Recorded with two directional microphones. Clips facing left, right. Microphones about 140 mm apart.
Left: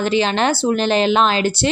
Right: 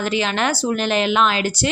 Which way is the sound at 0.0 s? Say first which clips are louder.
Left 4 dB; 30° left (ahead or behind).